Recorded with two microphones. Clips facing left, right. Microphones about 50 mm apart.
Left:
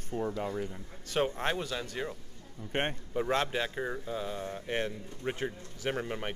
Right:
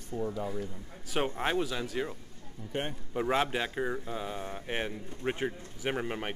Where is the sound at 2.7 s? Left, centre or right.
Left.